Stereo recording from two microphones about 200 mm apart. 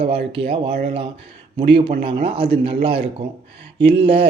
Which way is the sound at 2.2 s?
25° right (ahead or behind).